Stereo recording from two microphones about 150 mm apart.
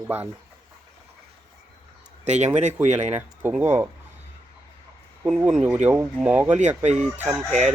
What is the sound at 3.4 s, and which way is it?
Speech, 10° right (ahead or behind).